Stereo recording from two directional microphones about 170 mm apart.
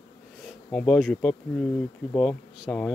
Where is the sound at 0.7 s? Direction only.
5° left (ahead or behind).